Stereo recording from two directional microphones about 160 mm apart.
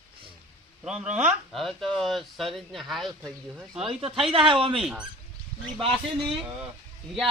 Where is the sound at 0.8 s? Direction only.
5° right (ahead or behind).